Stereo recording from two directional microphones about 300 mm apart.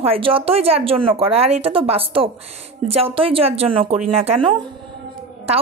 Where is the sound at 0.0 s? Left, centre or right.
Centre.